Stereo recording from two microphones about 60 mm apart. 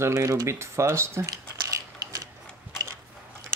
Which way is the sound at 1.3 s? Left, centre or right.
Right.